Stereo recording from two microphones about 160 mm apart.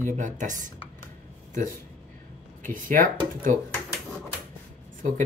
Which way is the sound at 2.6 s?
60° right (ahead or behind).